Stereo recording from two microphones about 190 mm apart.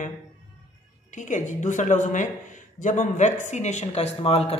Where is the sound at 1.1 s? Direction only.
40° left (ahead or behind).